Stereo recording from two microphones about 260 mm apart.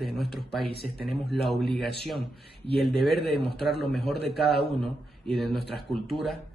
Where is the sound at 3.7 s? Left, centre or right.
Left.